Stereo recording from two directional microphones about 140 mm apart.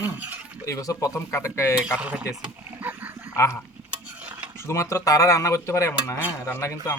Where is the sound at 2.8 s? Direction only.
15° right (ahead or behind).